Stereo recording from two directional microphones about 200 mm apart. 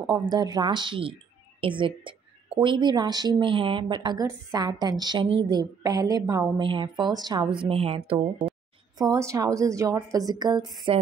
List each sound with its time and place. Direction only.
0.1 s a woman's voice: 20° right (ahead or behind)
8.9 s a woman's voice: 20° right (ahead or behind)